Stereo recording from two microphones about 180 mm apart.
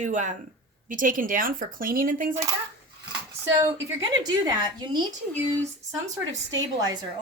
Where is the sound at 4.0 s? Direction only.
20° right (ahead or behind).